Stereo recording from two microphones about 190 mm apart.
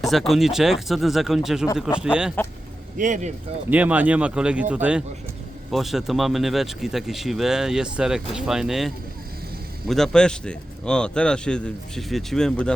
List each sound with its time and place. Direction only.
0.0 s speech: centre (ahead or behind)
3.0 s speech: 40° right (ahead or behind)
3.7 s speech: 10° right (ahead or behind)